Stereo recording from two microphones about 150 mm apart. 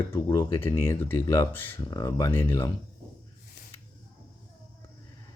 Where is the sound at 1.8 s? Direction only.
25° left (ahead or behind).